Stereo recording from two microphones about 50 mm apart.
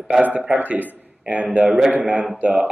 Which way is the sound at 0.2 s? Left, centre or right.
Right.